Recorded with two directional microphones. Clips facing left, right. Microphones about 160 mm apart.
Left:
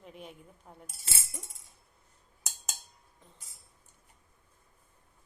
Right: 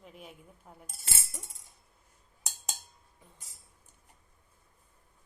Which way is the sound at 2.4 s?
Centre (ahead or behind).